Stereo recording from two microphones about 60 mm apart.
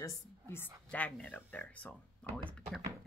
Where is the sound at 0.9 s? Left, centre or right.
Left.